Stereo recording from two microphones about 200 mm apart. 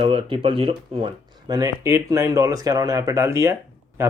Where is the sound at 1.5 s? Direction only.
15° right (ahead or behind).